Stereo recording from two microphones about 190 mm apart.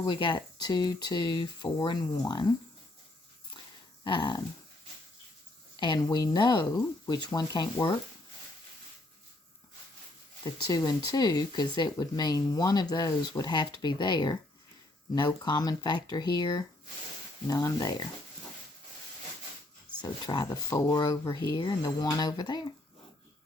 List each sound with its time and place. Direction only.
0.0 s speech: 25° left (ahead or behind)
4.0 s speech: 25° left (ahead or behind)
5.7 s speech: 20° left (ahead or behind)
10.4 s speech: 20° left (ahead or behind)
20.0 s speech: 20° left (ahead or behind)